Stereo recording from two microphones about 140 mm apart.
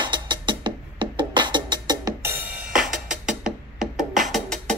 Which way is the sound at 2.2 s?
10° right (ahead or behind).